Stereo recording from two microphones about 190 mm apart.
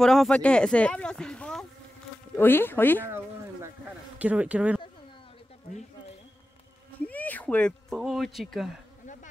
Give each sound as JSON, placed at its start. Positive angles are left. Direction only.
{"t": 0.0, "sound": "speech", "side_deg": 0}
{"t": 4.2, "sound": "speech", "side_deg": -5}
{"t": 7.1, "sound": "speech", "side_deg": 10}
{"t": 9.0, "sound": "insect", "side_deg": 40}